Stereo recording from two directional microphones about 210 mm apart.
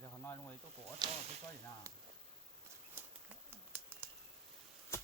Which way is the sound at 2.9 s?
10° right (ahead or behind).